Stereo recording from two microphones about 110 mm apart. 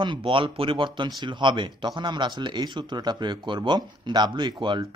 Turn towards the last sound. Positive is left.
turn(degrees=-45)  # may be behind; listen again after turning